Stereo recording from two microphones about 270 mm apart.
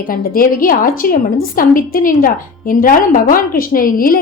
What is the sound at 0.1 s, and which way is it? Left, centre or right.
Speech, left.